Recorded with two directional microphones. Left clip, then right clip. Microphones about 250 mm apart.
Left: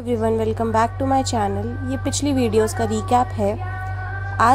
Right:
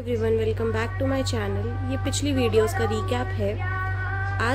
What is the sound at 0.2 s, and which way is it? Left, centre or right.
A woman's voice, left.